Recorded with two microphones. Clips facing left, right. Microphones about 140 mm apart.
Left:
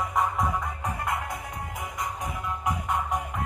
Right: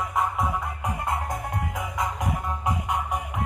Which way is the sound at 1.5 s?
75° right (ahead or behind).